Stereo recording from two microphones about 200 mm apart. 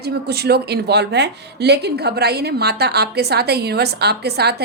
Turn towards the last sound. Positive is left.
turn(degrees=-55)  # may be behind; listen again after turning